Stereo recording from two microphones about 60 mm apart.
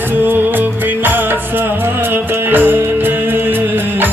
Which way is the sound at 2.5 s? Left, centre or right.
Right.